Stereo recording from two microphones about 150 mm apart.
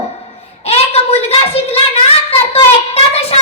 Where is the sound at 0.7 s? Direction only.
40° left (ahead or behind).